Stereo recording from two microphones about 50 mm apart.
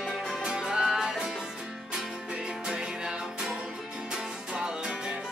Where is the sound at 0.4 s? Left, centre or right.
Centre.